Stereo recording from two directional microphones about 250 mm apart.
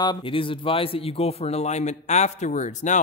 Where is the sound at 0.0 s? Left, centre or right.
Centre.